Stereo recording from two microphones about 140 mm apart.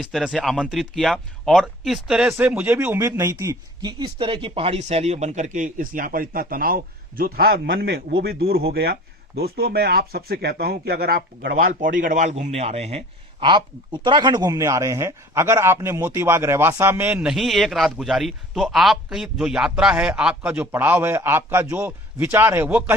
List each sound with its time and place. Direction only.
0.0 s speech: centre (ahead or behind); by 11.2 s 90° right
11.6 s a man's voice: 75° right (ahead or behind); by 13.1 s 50° right (ahead or behind)
13.4 s speech: 35° right (ahead or behind); by 23.0 s 15° right (ahead or behind)